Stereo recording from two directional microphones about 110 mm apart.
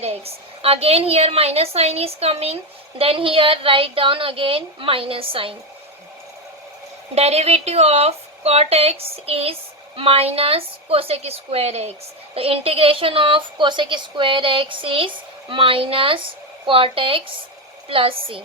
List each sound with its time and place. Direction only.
0.6 s a woman's voice: 60° right (ahead or behind)
3.0 s a woman's voice: 55° right (ahead or behind)
7.2 s a woman's voice: 75° right (ahead or behind)
12.3 s a woman's voice: 60° right (ahead or behind)